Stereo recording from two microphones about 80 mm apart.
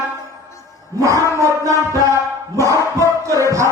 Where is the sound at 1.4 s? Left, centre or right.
Right.